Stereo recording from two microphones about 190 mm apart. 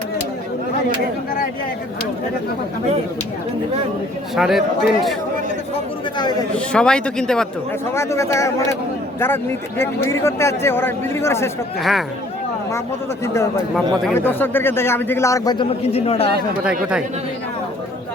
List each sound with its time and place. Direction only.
4.4 s speech: centre (ahead or behind)
6.5 s speech: 5° left (ahead or behind)
7.9 s speech: 15° left (ahead or behind)
11.8 s speech: centre (ahead or behind)
13.2 s speech: 15° left (ahead or behind)
15.8 s speech: 35° left (ahead or behind)